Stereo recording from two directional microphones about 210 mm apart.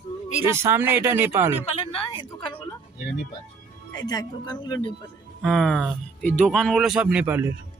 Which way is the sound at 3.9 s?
20° left (ahead or behind).